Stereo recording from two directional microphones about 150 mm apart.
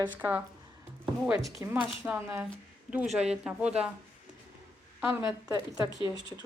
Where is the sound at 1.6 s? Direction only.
10° right (ahead or behind).